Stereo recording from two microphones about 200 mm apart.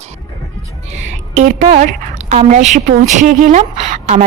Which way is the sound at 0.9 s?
35° right (ahead or behind).